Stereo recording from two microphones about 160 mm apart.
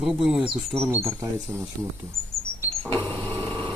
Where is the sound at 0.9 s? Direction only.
15° right (ahead or behind).